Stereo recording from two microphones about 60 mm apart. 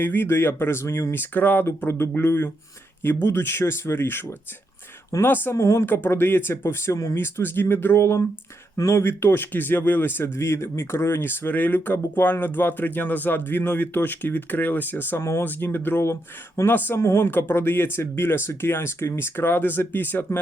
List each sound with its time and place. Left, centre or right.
0.0 s speech: left
1.1 s speech: left
5.5 s speech: left
5.8 s speech: left
7.2 s speech: left
15.2 s speech: left
15.4 s speech: left
17.0 s speech: left